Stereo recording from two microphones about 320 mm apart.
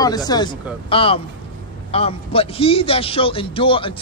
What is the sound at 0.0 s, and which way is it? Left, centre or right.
A man's voice, centre.